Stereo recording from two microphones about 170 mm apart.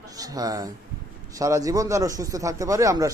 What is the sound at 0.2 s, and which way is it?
A man's voice, 20° right (ahead or behind).